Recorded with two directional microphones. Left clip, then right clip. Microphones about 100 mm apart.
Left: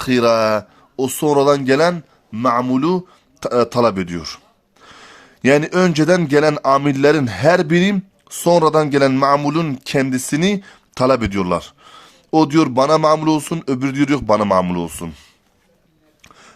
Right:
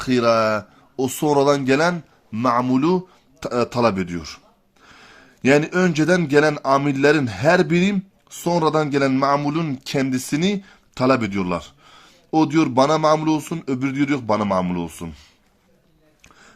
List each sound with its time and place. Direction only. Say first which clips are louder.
0.0 s speech: left 3 dB; 50° left (ahead or behind)
0.9 s speech: left 3 dB; 25° left (ahead or behind)
3.4 s speech: left 4 dB; 40° left (ahead or behind)
16.2 s a sound: left 4 dB; 50° left (ahead or behind)